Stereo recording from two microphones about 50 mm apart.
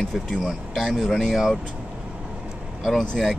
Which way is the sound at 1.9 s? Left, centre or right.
Centre.